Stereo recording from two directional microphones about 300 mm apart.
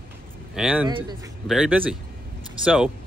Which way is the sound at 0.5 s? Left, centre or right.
Centre.